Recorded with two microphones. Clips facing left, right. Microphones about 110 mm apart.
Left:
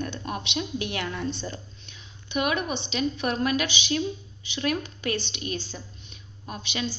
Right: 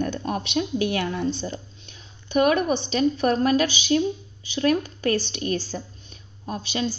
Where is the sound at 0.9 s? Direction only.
30° right (ahead or behind).